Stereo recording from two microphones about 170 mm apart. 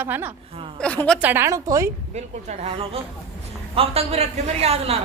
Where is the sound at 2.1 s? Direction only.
40° right (ahead or behind).